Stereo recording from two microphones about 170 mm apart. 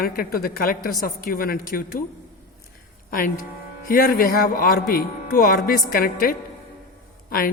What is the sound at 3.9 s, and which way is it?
A woman's voice, 55° left (ahead or behind).